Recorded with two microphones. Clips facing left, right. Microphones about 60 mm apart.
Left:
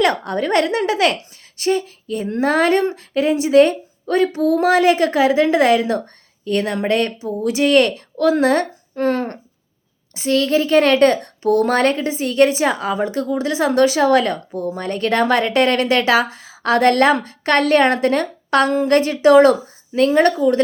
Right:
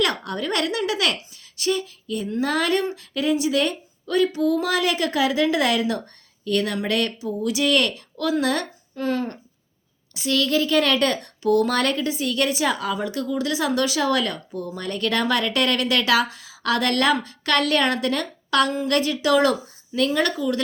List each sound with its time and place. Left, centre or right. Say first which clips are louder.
0.0 s a child's voice: left 6 dB; left
4.8 s a child's voice: left 7 dB; left
10.2 s a child's voice: left 5 dB; left